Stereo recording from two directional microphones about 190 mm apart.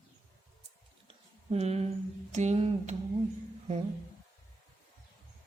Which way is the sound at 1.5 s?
35° right (ahead or behind).